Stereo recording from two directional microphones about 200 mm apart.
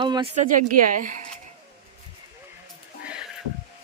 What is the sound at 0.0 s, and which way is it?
Speech, 25° right (ahead or behind).